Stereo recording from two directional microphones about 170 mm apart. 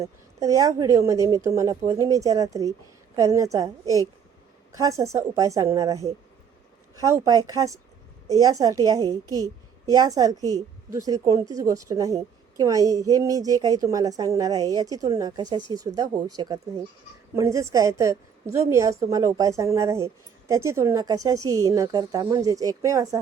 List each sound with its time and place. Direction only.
0.0 s a woman's voice: 20° right (ahead or behind)